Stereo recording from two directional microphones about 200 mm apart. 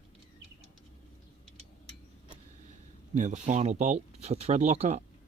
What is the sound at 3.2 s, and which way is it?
Speech, 35° right (ahead or behind).